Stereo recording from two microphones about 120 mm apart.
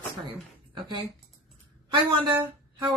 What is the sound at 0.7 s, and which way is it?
Speech, 40° right (ahead or behind).